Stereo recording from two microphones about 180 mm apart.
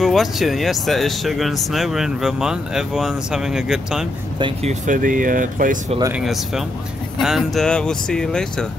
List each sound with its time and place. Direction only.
0.0 s speech: centre (ahead or behind)
4.4 s speech: 30° right (ahead or behind); by 5.8 s 50° right (ahead or behind)
6.1 s speech: centre (ahead or behind)